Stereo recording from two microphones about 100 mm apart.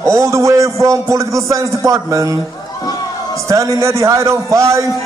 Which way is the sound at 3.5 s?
30° right (ahead or behind).